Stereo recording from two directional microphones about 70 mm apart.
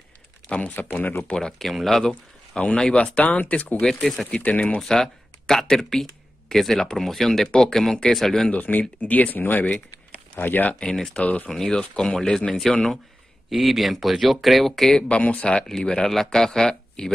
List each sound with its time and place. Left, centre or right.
0.5 s speech: left
1.3 s speech: centre
3.8 s speech: centre
4.4 s speech: centre
4.8 s speech: centre
8.5 s speech: left
10.8 s speech: centre
15.0 s speech: centre